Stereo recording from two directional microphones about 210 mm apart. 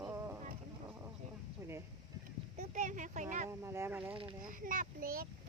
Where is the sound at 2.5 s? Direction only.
35° right (ahead or behind).